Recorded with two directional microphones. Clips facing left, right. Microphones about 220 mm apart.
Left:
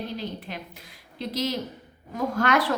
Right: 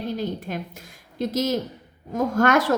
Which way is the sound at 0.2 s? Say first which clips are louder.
Right 6 dB; 45° right (ahead or behind).